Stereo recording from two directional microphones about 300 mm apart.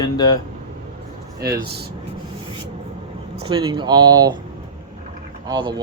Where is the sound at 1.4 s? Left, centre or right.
Right.